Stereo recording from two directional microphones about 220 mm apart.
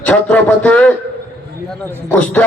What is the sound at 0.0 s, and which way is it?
Speech, 5° left (ahead or behind).